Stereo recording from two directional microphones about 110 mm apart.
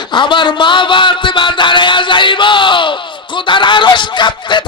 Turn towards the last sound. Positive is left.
turn(degrees=45)  # may be behind; listen again after turning